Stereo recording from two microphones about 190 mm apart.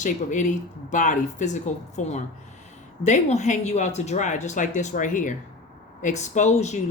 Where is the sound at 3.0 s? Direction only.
40° left (ahead or behind).